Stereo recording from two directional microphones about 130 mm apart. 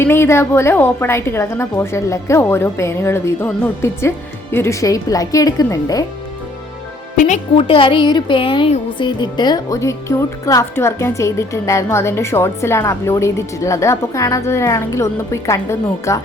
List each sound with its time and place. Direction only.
0.0 s speech: 20° left (ahead or behind)
7.5 s speech: 40° left (ahead or behind); by 16.2 s 25° left (ahead or behind)